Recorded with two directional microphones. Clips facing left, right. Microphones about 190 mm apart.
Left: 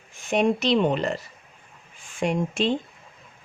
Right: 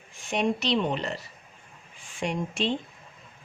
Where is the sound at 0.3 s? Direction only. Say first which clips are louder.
Left 5 dB; 50° left (ahead or behind).